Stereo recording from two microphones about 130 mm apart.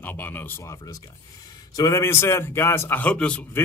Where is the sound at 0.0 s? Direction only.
15° left (ahead or behind).